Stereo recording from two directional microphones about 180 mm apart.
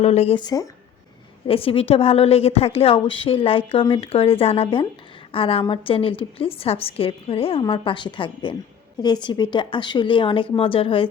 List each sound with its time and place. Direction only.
0.0 s speech: 35° left (ahead or behind)
1.5 s a woman's voice: 30° left (ahead or behind)